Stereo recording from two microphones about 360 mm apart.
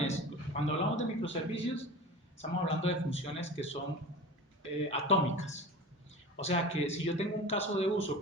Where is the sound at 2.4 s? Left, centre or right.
Centre.